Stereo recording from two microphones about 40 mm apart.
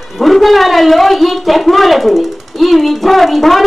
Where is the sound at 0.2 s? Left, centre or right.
Centre.